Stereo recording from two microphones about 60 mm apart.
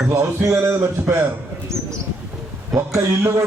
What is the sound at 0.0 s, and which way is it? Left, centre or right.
Speech, right.